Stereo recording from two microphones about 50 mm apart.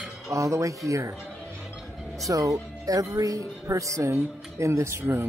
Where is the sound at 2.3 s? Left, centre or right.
Right.